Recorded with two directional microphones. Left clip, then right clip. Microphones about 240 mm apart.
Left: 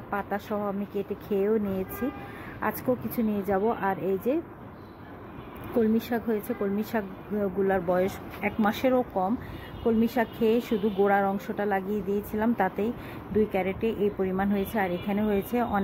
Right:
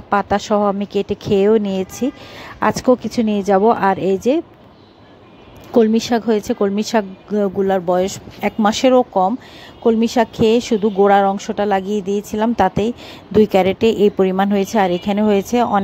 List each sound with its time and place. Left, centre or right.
0.1 s a woman's voice: right
5.8 s a woman's voice: right